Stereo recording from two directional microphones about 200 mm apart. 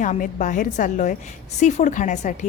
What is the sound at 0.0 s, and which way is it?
A woman's voice, 40° left (ahead or behind).